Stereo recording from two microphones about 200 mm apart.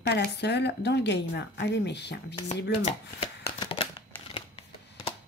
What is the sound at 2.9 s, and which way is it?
Shuffling cards, 35° left (ahead or behind).